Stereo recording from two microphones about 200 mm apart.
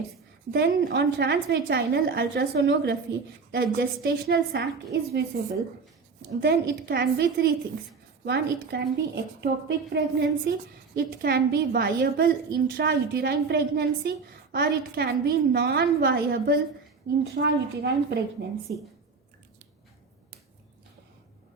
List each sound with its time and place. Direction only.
0.5 s a woman's voice: 55° right (ahead or behind)
6.4 s a woman's voice: 55° right (ahead or behind)